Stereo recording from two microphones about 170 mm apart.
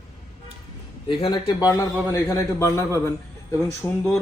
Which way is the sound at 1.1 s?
25° left (ahead or behind).